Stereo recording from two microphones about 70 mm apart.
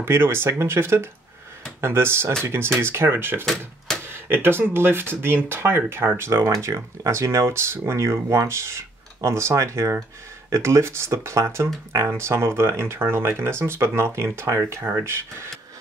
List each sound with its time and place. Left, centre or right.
0.0 s speech: right
3.4 s speech: centre
4.0 s speech: right
6.5 s speech: right